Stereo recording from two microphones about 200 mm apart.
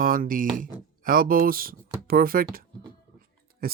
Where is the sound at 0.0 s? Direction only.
45° right (ahead or behind).